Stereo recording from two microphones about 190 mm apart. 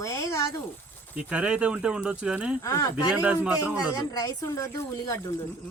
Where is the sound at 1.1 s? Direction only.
5° right (ahead or behind).